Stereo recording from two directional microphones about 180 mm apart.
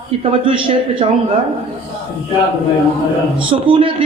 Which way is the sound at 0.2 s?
30° right (ahead or behind).